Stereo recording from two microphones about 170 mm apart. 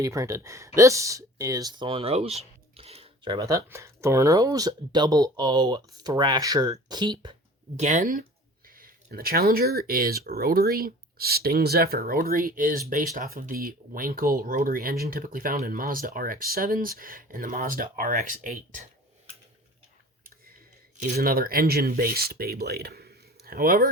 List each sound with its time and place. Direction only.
0.0 s speech: 20° right (ahead or behind)
7.8 s speech: 45° right (ahead or behind)
21.2 s speech: 60° right (ahead or behind)